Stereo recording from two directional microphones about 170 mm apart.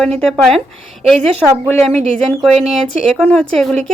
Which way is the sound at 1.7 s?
10° left (ahead or behind).